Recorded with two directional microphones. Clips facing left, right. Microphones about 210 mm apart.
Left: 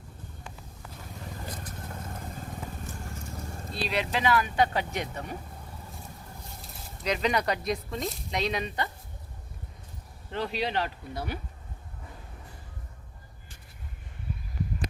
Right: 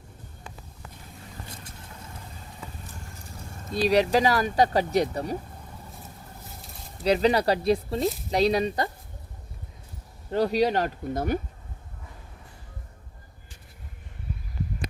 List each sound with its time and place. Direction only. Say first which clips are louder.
3.7 s speech: right 10 dB; 40° right (ahead or behind)
7.0 s speech: right 6 dB; 35° right (ahead or behind)
10.3 s speech: right 8 dB; 40° right (ahead or behind)